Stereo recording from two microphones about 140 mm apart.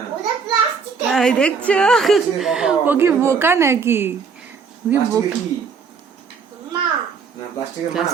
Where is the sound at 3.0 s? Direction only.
20° right (ahead or behind).